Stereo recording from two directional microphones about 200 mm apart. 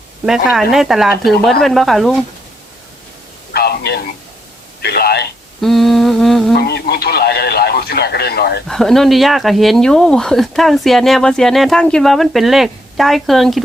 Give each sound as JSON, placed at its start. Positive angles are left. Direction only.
{"t": 0.3, "sound": "speech", "side_deg": 0}
{"t": 3.5, "sound": "radio", "side_deg": 50}
{"t": 4.8, "sound": "a sound", "side_deg": 55}
{"t": 5.5, "sound": "speech", "side_deg": 0}
{"t": 6.6, "sound": "speech", "side_deg": 55}
{"t": 8.6, "sound": "speech", "side_deg": 0}